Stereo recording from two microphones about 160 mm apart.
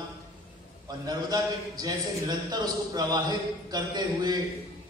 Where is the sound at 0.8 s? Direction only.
25° right (ahead or behind).